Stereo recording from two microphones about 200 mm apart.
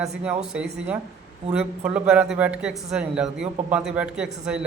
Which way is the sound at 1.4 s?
30° right (ahead or behind).